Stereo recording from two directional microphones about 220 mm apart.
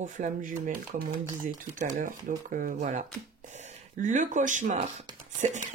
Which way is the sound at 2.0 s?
40° right (ahead or behind).